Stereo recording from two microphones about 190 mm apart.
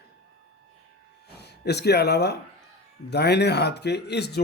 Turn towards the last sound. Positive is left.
turn(degrees=60)  # may be behind; listen again after turning